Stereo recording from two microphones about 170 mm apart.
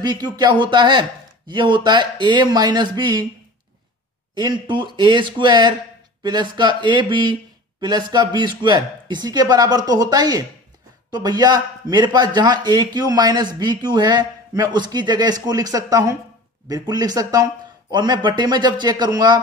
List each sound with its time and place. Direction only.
0.0 s speech: 25° right (ahead or behind)
4.4 s speech: 25° right (ahead or behind)